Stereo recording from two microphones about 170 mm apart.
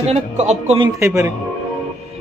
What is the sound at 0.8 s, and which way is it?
Speech, 20° right (ahead or behind).